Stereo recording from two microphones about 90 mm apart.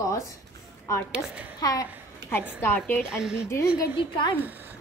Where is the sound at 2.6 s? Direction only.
20° left (ahead or behind).